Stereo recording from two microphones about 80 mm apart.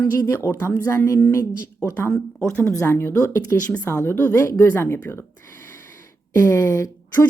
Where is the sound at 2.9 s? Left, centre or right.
Left.